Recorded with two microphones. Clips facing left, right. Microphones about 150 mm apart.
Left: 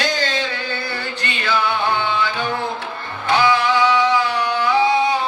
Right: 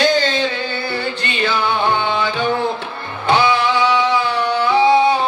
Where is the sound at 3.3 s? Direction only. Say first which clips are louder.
Right 1 dB; 25° right (ahead or behind).